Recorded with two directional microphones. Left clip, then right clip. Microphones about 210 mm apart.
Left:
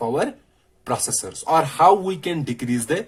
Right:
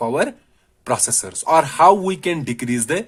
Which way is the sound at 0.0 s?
45° right (ahead or behind).